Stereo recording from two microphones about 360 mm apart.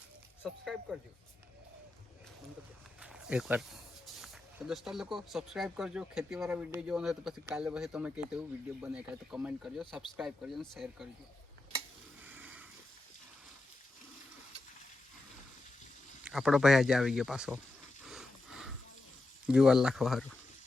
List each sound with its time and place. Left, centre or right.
0.4 s speech: centre
3.0 s speech: centre
12.2 s a sound: centre
16.2 s speech: centre
18.0 s a sound: centre
19.5 s speech: centre